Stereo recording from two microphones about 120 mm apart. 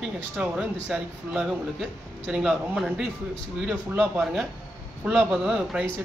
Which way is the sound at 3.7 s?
15° right (ahead or behind).